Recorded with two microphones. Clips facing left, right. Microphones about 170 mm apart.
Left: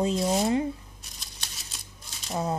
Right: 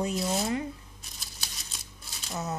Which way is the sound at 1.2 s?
5° right (ahead or behind).